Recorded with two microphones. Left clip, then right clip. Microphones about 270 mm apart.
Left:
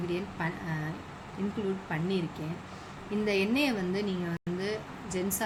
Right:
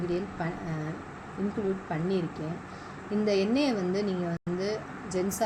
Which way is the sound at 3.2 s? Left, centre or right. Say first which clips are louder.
Right 2 dB; left.